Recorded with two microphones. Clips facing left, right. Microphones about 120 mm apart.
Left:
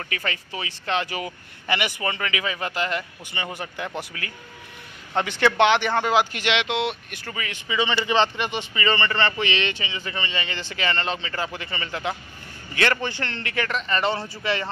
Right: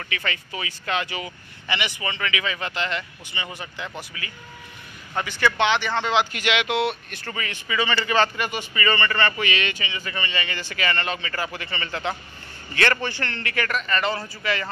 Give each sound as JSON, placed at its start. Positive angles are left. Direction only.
{"t": 0.0, "sound": "speech", "side_deg": 35}
{"t": 3.3, "sound": "speech", "side_deg": 55}
{"t": 5.4, "sound": "speech", "side_deg": 60}
{"t": 5.9, "sound": "speech", "side_deg": 45}